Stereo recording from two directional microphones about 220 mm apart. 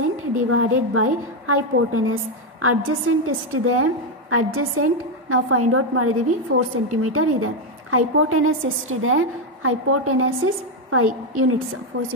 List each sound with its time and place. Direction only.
0.5 s a woman's voice: 75° right (ahead or behind)
11.9 s speech: 50° right (ahead or behind)